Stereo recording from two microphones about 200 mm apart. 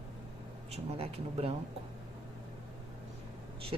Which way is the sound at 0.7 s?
30° right (ahead or behind).